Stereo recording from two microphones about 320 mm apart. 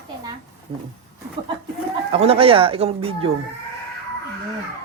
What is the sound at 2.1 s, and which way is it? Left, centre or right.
Speech, centre.